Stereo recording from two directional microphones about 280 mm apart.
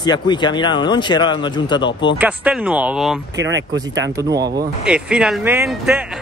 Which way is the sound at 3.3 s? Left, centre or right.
Right.